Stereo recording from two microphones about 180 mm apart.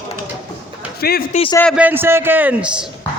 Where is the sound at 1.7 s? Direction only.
10° right (ahead or behind).